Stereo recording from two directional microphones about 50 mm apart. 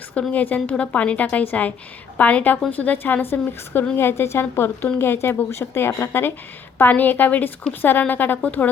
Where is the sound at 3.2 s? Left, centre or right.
Left.